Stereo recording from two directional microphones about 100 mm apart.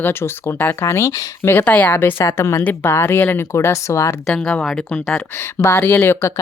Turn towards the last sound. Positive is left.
turn(degrees=25)  # may be behind; listen again after turning